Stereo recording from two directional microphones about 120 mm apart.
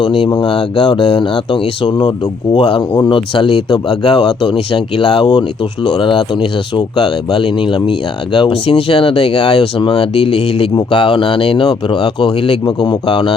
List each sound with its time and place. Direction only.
0.0 s speech: 45° left (ahead or behind)